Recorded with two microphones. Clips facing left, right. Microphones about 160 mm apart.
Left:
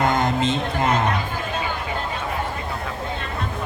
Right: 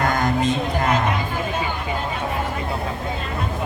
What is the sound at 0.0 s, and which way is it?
Music, 25° left (ahead or behind).